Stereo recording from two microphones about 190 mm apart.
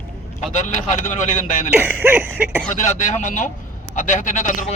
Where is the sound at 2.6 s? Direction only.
40° left (ahead or behind).